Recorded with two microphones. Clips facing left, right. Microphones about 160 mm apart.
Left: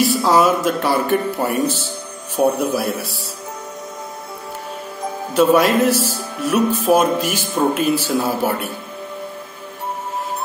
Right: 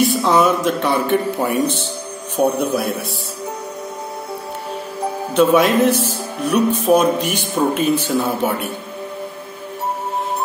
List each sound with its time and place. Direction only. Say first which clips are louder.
0.0 s speech: even; centre (ahead or behind)
5.3 s speech: even; centre (ahead or behind)